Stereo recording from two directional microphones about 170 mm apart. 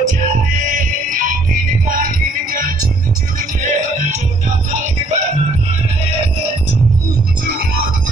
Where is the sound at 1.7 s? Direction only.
55° right (ahead or behind).